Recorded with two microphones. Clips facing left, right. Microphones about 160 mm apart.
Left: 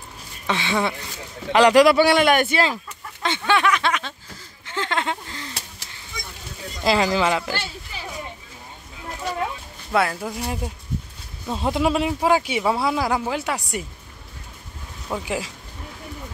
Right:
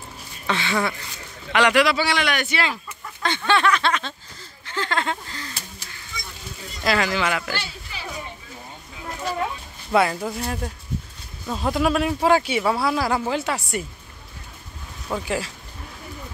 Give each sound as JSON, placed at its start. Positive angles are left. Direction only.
{"t": 0.5, "sound": "speech", "side_deg": 20}
{"t": 1.5, "sound": "speech", "side_deg": 35}
{"t": 1.9, "sound": "a man's voice", "side_deg": 50}
{"t": 3.2, "sound": "speech", "side_deg": 15}
{"t": 4.6, "sound": "a sound", "side_deg": 20}
{"t": 6.8, "sound": "a sound", "side_deg": 25}
{"t": 9.9, "sound": "speech", "side_deg": 0}
{"t": 10.3, "sound": "speech", "side_deg": 15}
{"t": 11.4, "sound": "a sound", "side_deg": 20}
{"t": 12.1, "sound": "speech", "side_deg": 10}
{"t": 15.0, "sound": "speech", "side_deg": 15}